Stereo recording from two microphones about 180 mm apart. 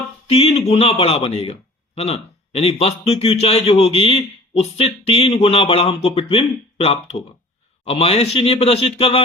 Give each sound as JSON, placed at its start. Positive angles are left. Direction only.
{"t": 0.3, "sound": "a man's voice", "side_deg": 35}